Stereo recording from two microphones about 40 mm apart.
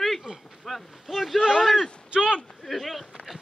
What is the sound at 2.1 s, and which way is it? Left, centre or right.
Speech, right.